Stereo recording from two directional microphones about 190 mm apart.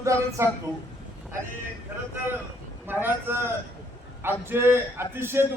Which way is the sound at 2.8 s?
10° right (ahead or behind).